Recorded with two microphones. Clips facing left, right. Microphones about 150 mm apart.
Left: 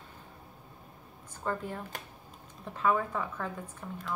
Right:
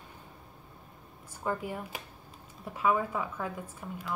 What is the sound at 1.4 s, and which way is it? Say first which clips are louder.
Speech: right 1 dB; 10° right (ahead or behind).